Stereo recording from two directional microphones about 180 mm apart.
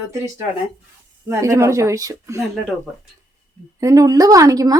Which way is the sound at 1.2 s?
15° right (ahead or behind).